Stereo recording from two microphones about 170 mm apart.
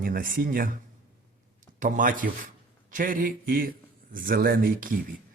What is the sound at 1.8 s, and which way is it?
Speech, 50° right (ahead or behind).